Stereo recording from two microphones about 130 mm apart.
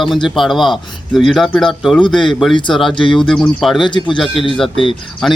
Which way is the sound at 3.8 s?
35° left (ahead or behind).